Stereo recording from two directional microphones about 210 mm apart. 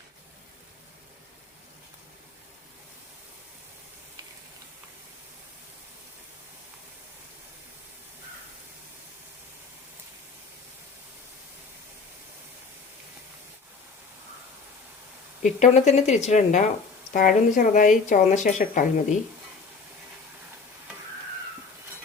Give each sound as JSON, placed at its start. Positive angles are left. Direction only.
{"t": 15.4, "sound": "speech", "side_deg": 35}